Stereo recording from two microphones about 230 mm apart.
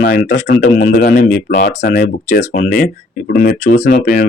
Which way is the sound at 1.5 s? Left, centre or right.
Left.